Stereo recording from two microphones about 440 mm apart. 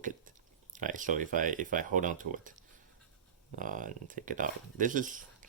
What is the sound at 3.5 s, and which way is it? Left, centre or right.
Speech, centre.